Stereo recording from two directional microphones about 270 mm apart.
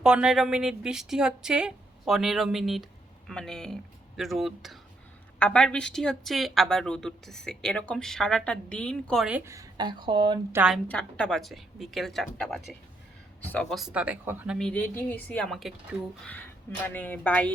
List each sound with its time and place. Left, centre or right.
0.0 s a woman's voice: centre
10.6 s a woman's voice: centre
16.8 s a woman's voice: centre